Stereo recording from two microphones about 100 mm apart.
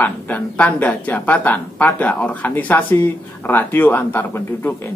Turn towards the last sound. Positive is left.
turn(degrees=20)  # may be behind; listen again after turning